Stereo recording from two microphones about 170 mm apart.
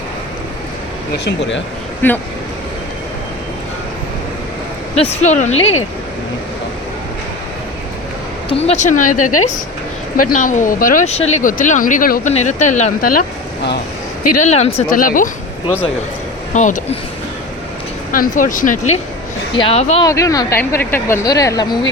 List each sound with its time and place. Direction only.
1.2 s speech: 90° left
2.0 s speech: 10° left (ahead or behind)
4.9 s speech: 40° left (ahead or behind)
8.4 s speech: 40° left (ahead or behind)
10.2 s speech: 50° left (ahead or behind)
12.3 s speech: 45° left (ahead or behind)
14.3 s speech: 40° left (ahead or behind)
14.9 s speech: 55° left (ahead or behind)
16.6 s speech: 45° left (ahead or behind)
18.1 s speech: 55° left (ahead or behind)
19.5 s speech: 35° left (ahead or behind)
20.1 s a woman's voice: 20° left (ahead or behind)